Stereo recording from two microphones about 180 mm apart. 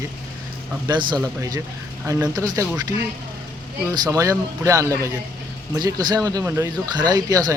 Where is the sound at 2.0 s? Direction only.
15° right (ahead or behind).